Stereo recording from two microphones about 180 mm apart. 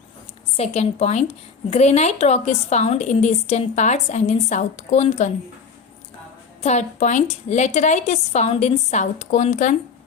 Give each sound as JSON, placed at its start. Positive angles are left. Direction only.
{"t": 0.5, "sound": "a woman's voice", "side_deg": 35}
{"t": 6.6, "sound": "a woman's voice", "side_deg": 40}